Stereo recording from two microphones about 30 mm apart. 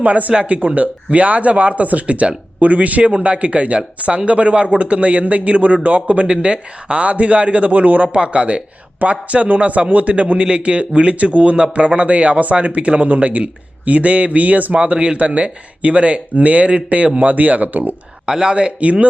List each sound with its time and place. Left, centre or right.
0.0 s speech: right
0.4 s speech: right
7.7 s speech: right
8.1 s speech: right
13.1 s speech: right
14.7 s speech: right
15.2 s speech: right
17.2 s speech: right
18.3 s speech: right
18.8 s speech: right